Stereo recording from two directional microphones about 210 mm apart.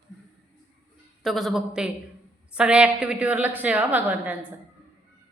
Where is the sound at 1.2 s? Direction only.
Centre (ahead or behind).